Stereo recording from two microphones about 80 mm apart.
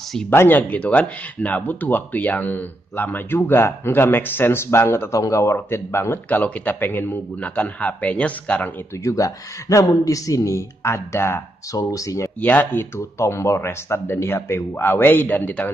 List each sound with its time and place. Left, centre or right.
0.3 s speech: left
5.1 s speech: left; by 8.7 s centre
9.0 s speech: left
12.4 s speech: left